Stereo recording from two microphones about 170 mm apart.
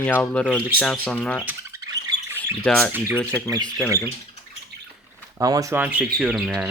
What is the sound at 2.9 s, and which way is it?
Speech, 15° right (ahead or behind).